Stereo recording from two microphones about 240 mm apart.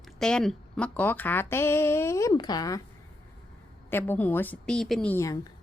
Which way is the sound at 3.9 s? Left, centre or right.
Centre.